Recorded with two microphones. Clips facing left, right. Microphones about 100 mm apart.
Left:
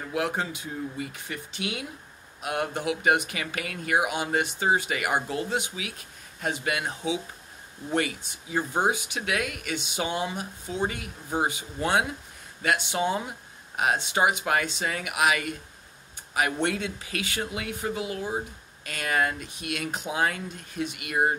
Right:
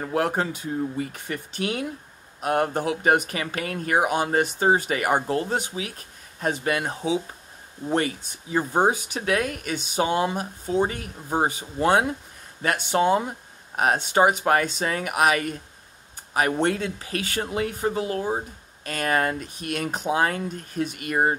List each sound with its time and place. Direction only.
0.0 s speech: 40° right (ahead or behind)